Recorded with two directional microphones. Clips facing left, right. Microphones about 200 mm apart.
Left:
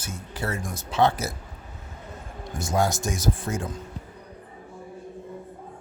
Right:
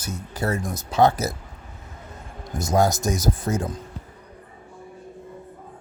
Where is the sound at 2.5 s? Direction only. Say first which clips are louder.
Right 4 dB; 40° right (ahead or behind).